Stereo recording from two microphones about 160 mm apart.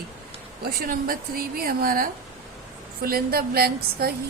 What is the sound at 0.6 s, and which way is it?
A woman's voice, 70° right (ahead or behind).